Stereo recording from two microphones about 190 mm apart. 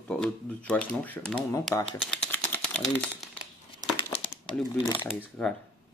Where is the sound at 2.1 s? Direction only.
5° left (ahead or behind).